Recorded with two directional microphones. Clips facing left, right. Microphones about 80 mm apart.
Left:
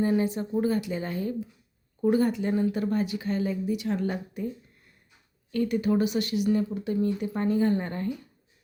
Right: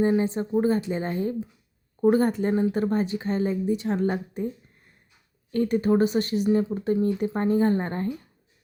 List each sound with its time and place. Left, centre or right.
0.0 s speech: right
5.5 s speech: right